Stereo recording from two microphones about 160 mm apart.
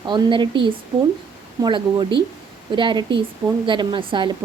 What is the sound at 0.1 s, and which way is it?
A woman's voice, 30° right (ahead or behind).